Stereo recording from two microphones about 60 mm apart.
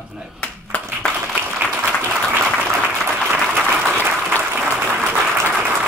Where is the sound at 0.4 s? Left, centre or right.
Left.